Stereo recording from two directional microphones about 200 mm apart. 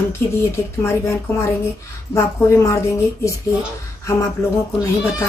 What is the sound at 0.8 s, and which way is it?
Speech, 15° left (ahead or behind).